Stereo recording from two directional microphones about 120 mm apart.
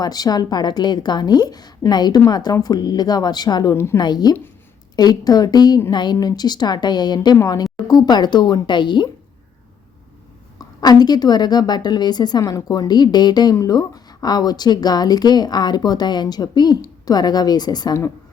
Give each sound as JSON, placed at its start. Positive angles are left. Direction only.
{"t": 0.0, "sound": "a woman's voice", "side_deg": 35}
{"t": 10.6, "sound": "a woman's voice", "side_deg": 35}